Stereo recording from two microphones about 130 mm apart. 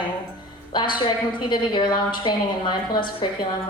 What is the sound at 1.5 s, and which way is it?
A woman's voice, 35° left (ahead or behind).